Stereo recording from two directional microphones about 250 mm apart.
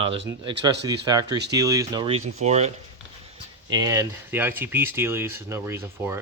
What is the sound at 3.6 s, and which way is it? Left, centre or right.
Speech, centre.